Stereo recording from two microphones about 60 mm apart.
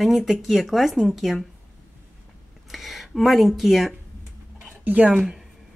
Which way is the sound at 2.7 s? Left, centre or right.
Centre.